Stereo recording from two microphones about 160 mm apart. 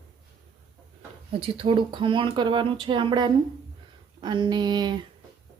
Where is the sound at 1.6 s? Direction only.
30° right (ahead or behind).